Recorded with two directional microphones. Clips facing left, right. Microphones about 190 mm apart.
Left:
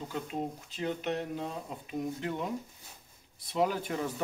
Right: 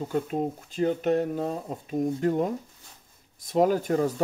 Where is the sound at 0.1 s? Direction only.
45° right (ahead or behind).